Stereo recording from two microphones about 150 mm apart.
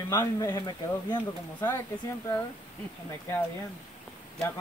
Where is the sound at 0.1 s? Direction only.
25° left (ahead or behind).